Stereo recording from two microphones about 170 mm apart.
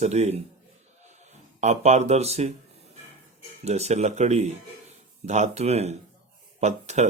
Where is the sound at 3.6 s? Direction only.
40° right (ahead or behind).